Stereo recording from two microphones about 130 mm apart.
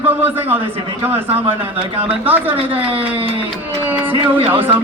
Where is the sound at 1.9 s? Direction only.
45° right (ahead or behind).